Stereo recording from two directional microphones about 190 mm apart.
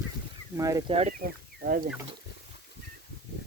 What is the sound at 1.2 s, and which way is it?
Speech, 50° right (ahead or behind).